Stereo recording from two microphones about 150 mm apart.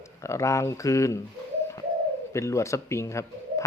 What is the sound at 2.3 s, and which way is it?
Speech, 20° left (ahead or behind).